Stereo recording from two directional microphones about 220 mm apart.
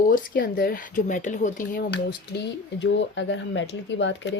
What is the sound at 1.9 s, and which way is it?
Speech, 50° left (ahead or behind).